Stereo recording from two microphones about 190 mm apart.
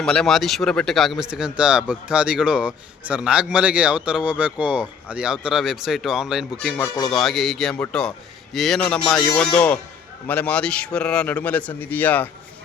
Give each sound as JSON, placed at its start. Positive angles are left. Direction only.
{"t": 0.0, "sound": "speech", "side_deg": 0}
{"t": 6.8, "sound": "speech", "side_deg": 20}
{"t": 7.1, "sound": "a man's voice", "side_deg": 0}